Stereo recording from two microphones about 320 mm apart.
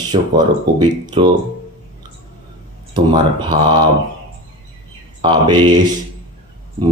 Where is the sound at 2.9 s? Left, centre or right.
Centre.